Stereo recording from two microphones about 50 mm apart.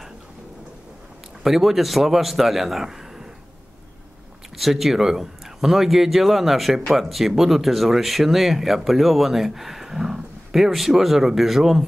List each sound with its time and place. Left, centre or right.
1.4 s speech: centre
4.6 s speech: centre